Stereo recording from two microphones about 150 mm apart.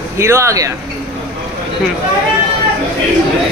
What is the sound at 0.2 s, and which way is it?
Speech, 20° right (ahead or behind).